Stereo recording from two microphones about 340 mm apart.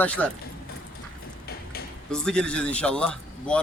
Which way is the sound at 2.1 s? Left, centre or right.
Centre.